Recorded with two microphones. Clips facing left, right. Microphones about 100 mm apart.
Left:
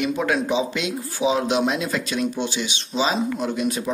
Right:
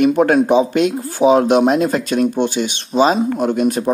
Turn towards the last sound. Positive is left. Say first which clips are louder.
# right 8 dB
turn(degrees=-50)  # may be behind; listen again after turning